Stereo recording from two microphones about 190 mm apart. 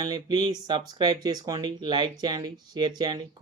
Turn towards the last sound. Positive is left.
turn(degrees=-20)  # may be behind; listen again after turning